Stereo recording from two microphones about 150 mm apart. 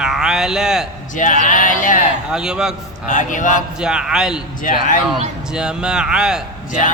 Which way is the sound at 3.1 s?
60° left (ahead or behind).